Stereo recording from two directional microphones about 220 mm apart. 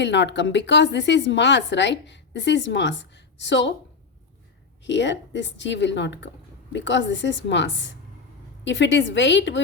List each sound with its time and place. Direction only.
0.0 s a woman's voice: 55° left (ahead or behind)
4.8 s a woman's voice: 55° left (ahead or behind)